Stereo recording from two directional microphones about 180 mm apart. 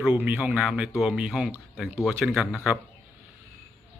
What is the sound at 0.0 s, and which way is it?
Speech, 10° right (ahead or behind).